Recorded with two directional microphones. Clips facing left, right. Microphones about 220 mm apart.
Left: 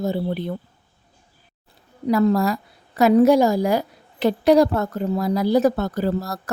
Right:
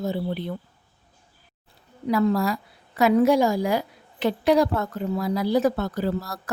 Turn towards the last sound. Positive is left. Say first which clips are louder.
# left 3 dB
turn(degrees=40)  # may be behind; listen again after turning